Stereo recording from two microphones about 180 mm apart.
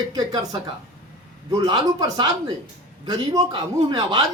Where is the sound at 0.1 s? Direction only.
20° right (ahead or behind).